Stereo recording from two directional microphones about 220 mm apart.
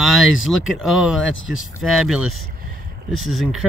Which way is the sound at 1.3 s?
60° left (ahead or behind).